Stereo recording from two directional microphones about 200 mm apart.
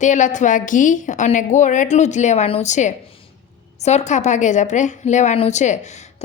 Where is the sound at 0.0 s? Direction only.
35° left (ahead or behind).